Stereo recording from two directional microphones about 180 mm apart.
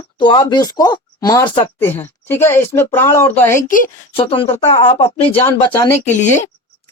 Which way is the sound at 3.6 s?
45° left (ahead or behind).